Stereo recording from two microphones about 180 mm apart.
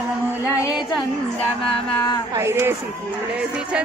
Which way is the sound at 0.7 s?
Centre (ahead or behind).